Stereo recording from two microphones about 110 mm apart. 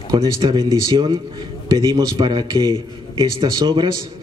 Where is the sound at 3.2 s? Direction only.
45° right (ahead or behind).